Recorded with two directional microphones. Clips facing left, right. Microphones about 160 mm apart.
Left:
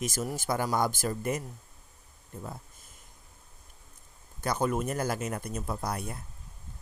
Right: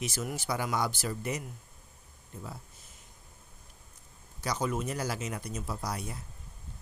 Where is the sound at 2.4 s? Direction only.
50° left (ahead or behind).